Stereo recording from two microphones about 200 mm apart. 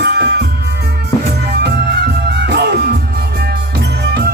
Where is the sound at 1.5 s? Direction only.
55° right (ahead or behind).